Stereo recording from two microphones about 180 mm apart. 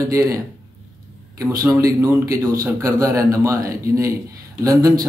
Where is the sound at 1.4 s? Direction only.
20° right (ahead or behind).